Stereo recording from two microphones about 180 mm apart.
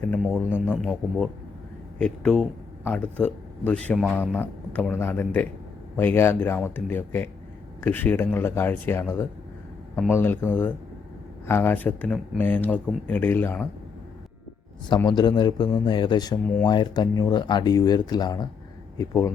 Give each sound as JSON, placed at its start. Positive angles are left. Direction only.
{"t": 0.7, "sound": "speech", "side_deg": 0}
{"t": 4.4, "sound": "speech", "side_deg": 10}
{"t": 14.8, "sound": "speech", "side_deg": 25}